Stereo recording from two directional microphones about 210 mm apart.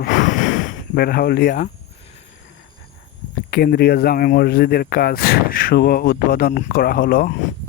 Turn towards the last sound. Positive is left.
turn(degrees=45)  # may be behind; listen again after turning